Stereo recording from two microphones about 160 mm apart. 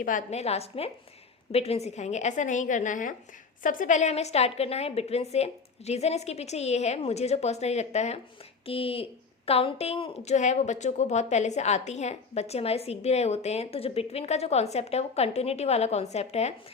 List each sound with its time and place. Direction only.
0.0 s a woman's voice: 55° left (ahead or behind)